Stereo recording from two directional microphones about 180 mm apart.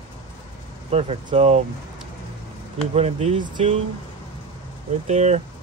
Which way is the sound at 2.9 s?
35° right (ahead or behind).